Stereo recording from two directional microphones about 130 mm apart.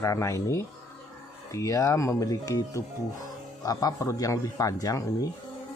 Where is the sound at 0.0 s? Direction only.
25° left (ahead or behind).